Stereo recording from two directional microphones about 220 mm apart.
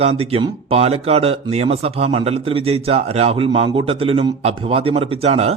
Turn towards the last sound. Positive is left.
turn(degrees=-30)  # may be behind; listen again after turning